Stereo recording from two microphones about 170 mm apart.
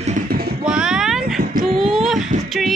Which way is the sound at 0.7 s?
5° right (ahead or behind).